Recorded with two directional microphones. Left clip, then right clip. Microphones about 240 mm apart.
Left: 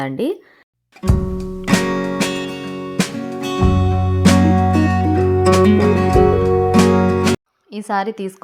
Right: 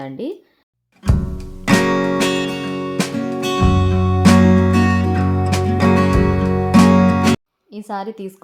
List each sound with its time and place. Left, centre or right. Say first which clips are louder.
0.0 s speech: left 6 dB; centre
1.0 s music: left 4 dB; centre
7.7 s a woman's voice: left 6 dB; centre